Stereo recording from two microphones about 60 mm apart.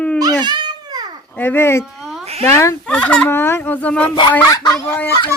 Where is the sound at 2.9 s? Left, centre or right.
Left.